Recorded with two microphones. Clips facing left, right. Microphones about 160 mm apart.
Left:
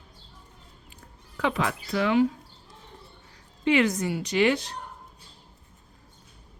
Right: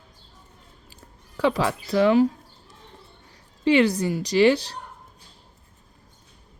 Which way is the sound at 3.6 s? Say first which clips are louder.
Right 4 dB; 30° right (ahead or behind).